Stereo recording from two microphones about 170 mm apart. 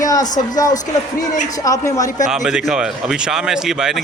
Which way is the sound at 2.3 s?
5° right (ahead or behind).